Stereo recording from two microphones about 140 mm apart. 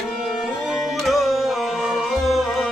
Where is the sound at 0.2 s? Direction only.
Centre (ahead or behind).